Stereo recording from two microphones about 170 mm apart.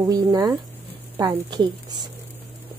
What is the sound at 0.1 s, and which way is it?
A woman's voice, 20° right (ahead or behind).